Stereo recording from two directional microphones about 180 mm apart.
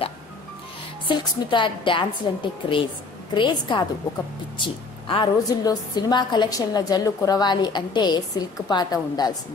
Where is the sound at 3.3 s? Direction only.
25° left (ahead or behind).